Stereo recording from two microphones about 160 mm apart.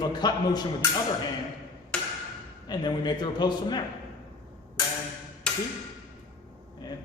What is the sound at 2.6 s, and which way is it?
A man's voice, 25° left (ahead or behind).